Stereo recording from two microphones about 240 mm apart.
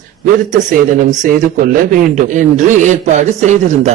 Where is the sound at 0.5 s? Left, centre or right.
Right.